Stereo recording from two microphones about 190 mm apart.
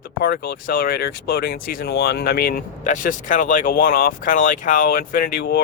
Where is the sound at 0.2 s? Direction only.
50° left (ahead or behind).